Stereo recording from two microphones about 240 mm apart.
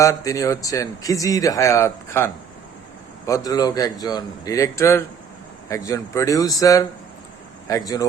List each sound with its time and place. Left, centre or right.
0.0 s speech: centre